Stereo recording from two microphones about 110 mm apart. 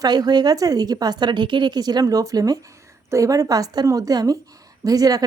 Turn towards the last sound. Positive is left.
turn(degrees=-35)  # may be behind; listen again after turning